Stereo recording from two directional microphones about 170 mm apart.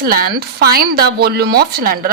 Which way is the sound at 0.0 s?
65° right (ahead or behind).